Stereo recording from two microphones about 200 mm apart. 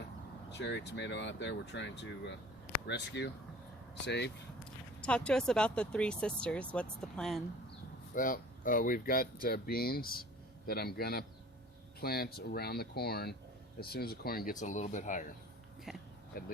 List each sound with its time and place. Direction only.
0.5 s speech: 60° left (ahead or behind)
4.6 s speech: 5° left (ahead or behind)
8.1 s speech: 40° left (ahead or behind)
15.9 s a sound: centre (ahead or behind)